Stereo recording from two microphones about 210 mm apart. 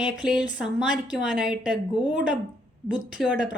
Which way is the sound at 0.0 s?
5° right (ahead or behind).